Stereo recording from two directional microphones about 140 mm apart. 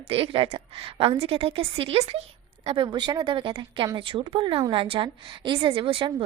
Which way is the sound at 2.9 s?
25° right (ahead or behind).